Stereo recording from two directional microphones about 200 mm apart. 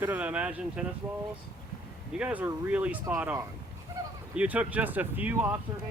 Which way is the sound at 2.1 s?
5° right (ahead or behind).